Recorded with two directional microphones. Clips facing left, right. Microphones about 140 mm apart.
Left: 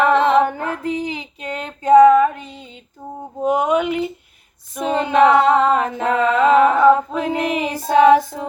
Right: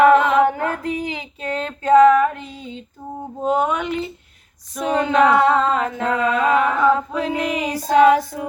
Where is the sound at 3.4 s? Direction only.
15° left (ahead or behind).